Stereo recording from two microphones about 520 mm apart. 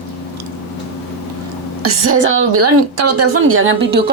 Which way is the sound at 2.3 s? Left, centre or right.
Right.